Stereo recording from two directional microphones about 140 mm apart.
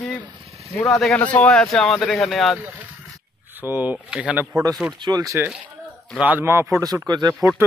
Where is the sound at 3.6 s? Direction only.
10° right (ahead or behind).